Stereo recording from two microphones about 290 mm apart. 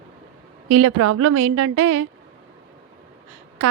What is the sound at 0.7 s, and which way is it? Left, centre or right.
Speech, right.